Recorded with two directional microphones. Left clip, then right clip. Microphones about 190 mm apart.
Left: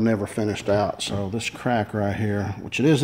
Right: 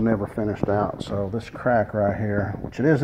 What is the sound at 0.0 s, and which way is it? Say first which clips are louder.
Speech: even; 30° left (ahead or behind).